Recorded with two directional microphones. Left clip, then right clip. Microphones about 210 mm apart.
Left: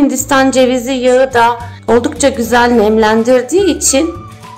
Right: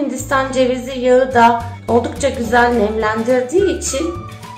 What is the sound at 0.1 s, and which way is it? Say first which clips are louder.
A woman's voice: left 6 dB; 50° left (ahead or behind).